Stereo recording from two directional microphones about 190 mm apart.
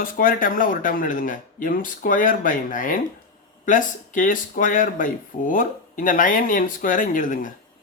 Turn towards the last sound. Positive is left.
turn(degrees=45)  # may be behind; listen again after turning